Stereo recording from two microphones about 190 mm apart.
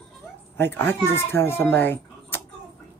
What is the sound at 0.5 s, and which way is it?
A child's voice, 10° left (ahead or behind).